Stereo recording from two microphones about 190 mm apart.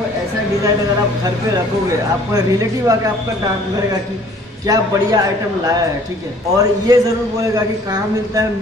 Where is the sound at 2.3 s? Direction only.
20° right (ahead or behind).